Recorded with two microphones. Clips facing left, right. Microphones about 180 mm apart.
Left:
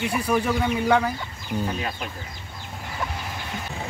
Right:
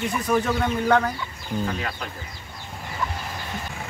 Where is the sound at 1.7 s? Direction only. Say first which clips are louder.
Even; 20° left (ahead or behind).